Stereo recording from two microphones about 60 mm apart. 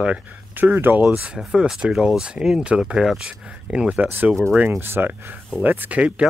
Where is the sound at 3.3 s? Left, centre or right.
Centre.